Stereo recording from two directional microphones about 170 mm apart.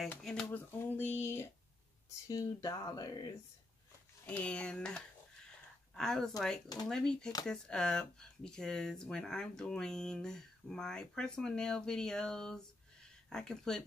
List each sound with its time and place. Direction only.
0.1 s speech: 5° left (ahead or behind); by 3.3 s 25° left (ahead or behind)
4.3 s speech: 5° left (ahead or behind)